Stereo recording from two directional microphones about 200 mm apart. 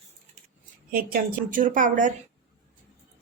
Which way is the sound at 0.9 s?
45° right (ahead or behind).